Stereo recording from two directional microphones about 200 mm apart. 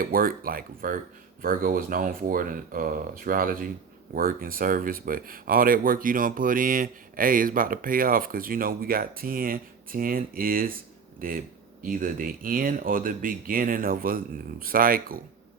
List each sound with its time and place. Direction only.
0.0 s speech: 45° right (ahead or behind)